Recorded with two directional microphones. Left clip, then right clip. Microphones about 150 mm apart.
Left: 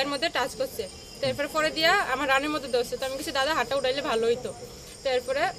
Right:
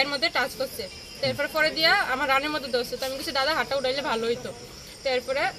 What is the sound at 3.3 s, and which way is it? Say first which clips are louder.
Speech: right 1 dB; 15° left (ahead or behind).